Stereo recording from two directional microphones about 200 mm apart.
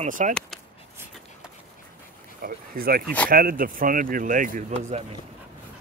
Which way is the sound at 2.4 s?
45° right (ahead or behind).